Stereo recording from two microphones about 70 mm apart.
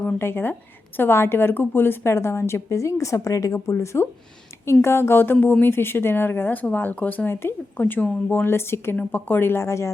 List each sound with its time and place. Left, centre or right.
0.2 s a woman's voice: left
7.3 s a woman's voice: left
7.8 s a woman's voice: left
9.0 s a woman's voice: left